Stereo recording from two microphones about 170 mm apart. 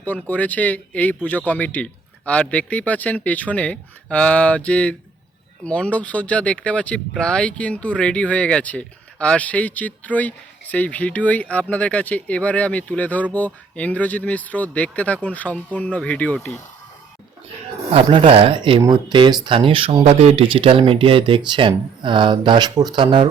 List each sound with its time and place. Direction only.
0.0 s speech: 10° left (ahead or behind)
17.9 s speech: 30° right (ahead or behind)